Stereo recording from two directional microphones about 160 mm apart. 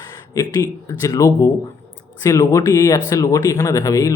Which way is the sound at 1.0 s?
20° left (ahead or behind).